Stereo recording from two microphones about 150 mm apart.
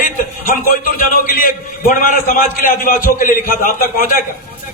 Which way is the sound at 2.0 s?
65° left (ahead or behind).